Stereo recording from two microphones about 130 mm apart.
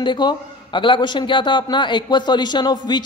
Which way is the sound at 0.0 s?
35° left (ahead or behind).